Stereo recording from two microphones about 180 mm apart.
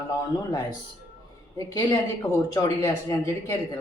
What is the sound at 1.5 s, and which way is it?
Speech, 20° left (ahead or behind).